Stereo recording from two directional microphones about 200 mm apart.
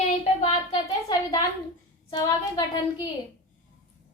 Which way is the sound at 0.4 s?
20° left (ahead or behind).